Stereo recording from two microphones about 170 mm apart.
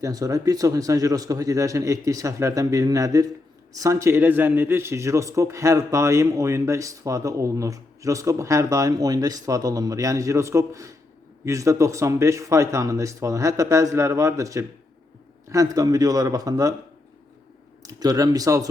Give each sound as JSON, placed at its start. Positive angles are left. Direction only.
{"t": 0.0, "sound": "a man's voice", "side_deg": -20}
{"t": 17.8, "sound": "a man's voice", "side_deg": -20}